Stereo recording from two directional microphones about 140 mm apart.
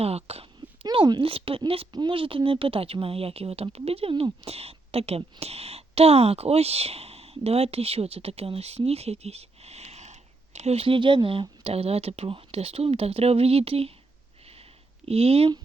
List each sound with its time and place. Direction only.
0.0 s a sound: 45° right (ahead or behind)
0.9 s speech: 30° right (ahead or behind)
15.0 s speech: 45° right (ahead or behind)